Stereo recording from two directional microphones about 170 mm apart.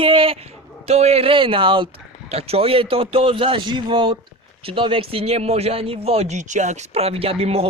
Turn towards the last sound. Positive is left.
turn(degrees=-35)  # may be behind; listen again after turning